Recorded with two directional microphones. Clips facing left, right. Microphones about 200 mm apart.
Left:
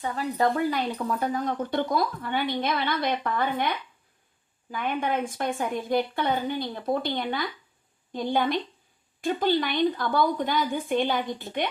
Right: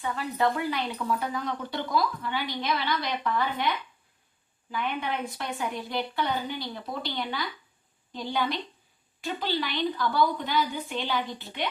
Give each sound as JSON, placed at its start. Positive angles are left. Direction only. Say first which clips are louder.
{"t": 0.0, "sound": "speech", "louder": "left 2 dB", "side_deg": 40}
{"t": 4.7, "sound": "speech", "louder": "left 3 dB", "side_deg": 50}